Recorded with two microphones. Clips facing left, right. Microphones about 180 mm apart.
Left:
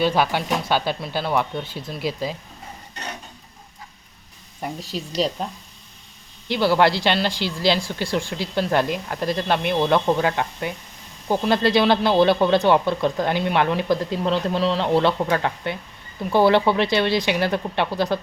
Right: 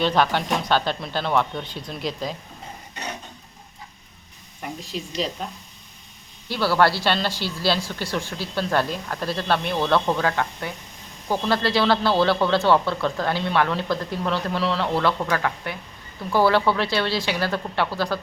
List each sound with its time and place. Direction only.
0.0 s speech: 10° left (ahead or behind)
6.5 s speech: 15° left (ahead or behind)